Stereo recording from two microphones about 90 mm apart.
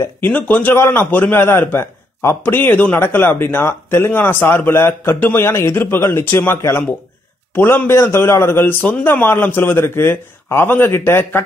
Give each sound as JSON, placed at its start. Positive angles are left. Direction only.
{"t": 0.2, "sound": "a man's voice", "side_deg": 20}